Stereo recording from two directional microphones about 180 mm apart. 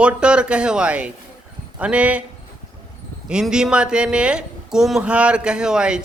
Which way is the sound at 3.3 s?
5° right (ahead or behind).